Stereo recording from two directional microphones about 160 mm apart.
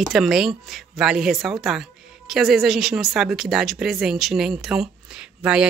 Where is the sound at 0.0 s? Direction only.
Centre (ahead or behind).